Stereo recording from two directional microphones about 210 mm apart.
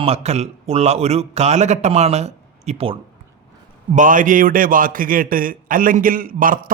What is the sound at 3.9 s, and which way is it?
A man's voice, 40° right (ahead or behind).